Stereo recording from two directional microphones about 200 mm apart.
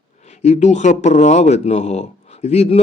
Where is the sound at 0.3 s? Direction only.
35° left (ahead or behind).